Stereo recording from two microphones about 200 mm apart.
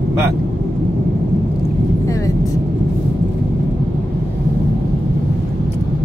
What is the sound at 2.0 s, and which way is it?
Vehicle, 15° left (ahead or behind).